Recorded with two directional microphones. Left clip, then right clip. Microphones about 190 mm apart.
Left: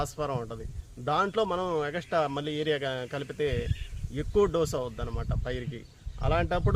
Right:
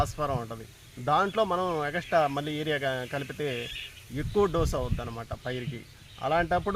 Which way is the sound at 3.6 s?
15° right (ahead or behind).